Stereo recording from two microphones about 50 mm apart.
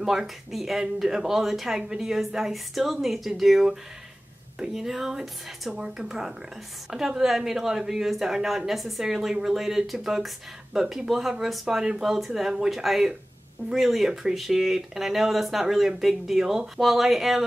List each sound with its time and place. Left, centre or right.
0.0 s a woman's voice: centre
12.0 s a woman's voice: centre